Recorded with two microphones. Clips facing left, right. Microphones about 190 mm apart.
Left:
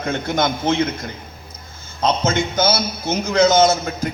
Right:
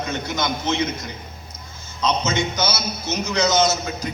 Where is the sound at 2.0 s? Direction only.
55° left (ahead or behind).